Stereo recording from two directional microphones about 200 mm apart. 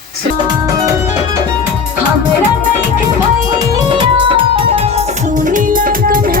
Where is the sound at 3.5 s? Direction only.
25° right (ahead or behind).